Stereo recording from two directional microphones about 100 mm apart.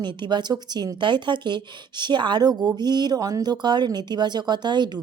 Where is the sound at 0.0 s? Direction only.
50° right (ahead or behind).